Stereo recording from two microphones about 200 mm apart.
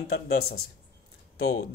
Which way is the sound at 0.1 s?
50° left (ahead or behind).